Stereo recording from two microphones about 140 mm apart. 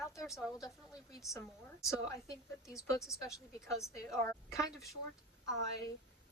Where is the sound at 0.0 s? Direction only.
Centre (ahead or behind).